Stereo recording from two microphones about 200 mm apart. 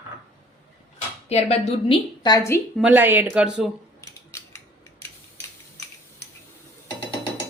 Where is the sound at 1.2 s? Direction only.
30° left (ahead or behind); by 2.6 s 15° left (ahead or behind).